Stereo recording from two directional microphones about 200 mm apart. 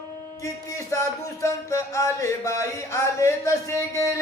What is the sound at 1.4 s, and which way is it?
Music, 15° left (ahead or behind).